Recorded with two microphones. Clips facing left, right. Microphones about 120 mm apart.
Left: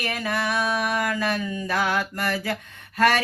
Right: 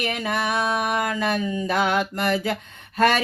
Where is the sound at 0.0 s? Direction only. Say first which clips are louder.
Right 2 dB; 20° right (ahead or behind).